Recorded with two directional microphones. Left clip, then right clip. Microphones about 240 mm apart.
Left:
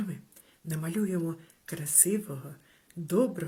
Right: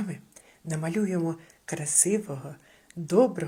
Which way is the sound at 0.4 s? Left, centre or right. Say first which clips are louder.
Right 5 dB; centre.